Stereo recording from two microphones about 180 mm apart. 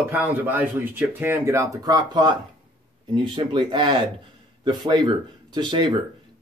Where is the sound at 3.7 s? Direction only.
25° right (ahead or behind).